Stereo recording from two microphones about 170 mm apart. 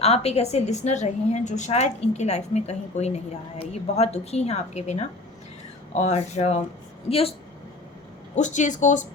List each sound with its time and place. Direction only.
0.0 s a woman's voice: 35° left (ahead or behind)
8.4 s speech: 45° left (ahead or behind)